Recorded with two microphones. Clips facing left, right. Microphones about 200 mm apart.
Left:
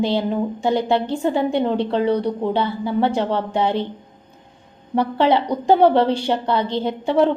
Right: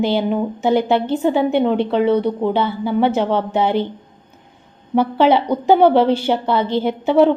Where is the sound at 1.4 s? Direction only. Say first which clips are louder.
Right 3 dB; 25° right (ahead or behind).